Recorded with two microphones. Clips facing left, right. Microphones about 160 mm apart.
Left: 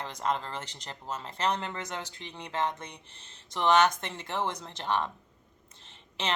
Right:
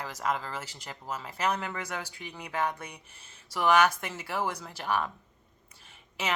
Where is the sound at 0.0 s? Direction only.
5° right (ahead or behind).